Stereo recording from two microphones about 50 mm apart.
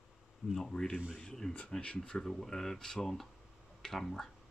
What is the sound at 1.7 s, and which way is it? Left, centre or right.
Speech, left.